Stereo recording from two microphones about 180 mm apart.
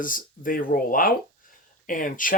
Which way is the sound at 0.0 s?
50° left (ahead or behind).